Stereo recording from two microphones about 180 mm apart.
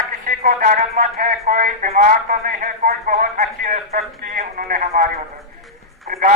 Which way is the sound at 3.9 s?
55° right (ahead or behind).